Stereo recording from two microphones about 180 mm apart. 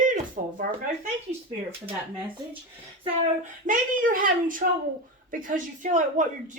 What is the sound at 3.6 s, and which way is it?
Speech, 50° right (ahead or behind).